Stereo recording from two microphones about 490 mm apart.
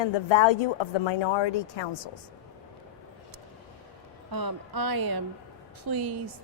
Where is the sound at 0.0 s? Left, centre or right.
Left.